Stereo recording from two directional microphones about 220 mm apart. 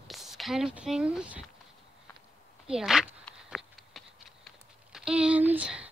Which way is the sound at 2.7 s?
Centre (ahead or behind).